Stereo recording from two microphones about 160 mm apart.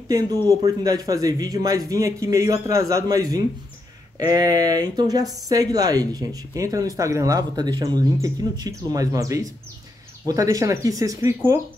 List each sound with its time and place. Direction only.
0.5 s speech: 20° right (ahead or behind)